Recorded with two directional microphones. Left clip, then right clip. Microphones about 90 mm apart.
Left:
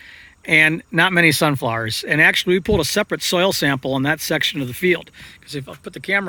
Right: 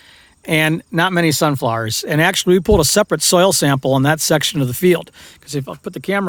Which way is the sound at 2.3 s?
55° right (ahead or behind).